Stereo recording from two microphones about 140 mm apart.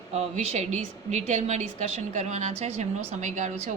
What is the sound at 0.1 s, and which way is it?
A woman's voice, 50° right (ahead or behind).